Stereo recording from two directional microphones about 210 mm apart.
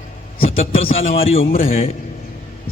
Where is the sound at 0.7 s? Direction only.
25° left (ahead or behind).